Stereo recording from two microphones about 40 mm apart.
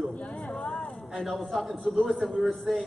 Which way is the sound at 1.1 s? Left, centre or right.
Centre.